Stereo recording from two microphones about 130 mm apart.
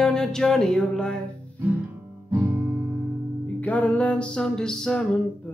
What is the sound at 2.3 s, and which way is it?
Music, 20° right (ahead or behind).